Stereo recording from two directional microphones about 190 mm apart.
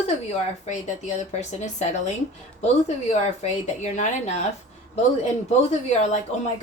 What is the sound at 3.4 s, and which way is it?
A woman's voice, 40° left (ahead or behind).